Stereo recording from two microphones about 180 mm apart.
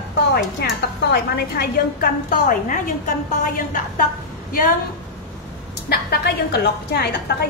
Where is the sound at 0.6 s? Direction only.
65° left (ahead or behind).